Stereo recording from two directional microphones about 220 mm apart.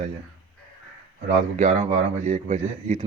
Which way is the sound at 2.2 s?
35° right (ahead or behind).